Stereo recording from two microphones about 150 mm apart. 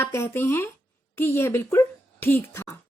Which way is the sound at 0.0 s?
15° left (ahead or behind).